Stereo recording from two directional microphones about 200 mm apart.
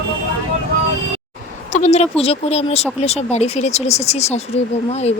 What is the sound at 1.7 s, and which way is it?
Speech, 35° left (ahead or behind).